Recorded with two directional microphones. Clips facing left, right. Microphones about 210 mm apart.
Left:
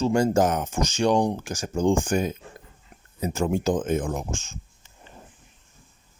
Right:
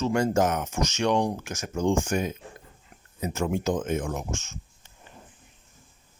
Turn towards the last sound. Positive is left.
turn(degrees=30)  # may be behind; listen again after turning